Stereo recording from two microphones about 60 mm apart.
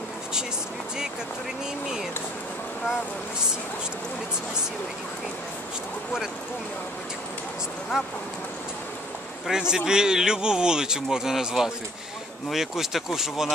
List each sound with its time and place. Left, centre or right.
7.9 s a man's voice: centre
9.5 s a man's voice: centre